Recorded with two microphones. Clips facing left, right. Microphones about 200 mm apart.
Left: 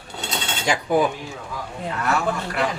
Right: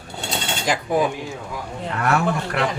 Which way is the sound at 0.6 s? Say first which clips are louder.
Left 1 dB; centre (ahead or behind).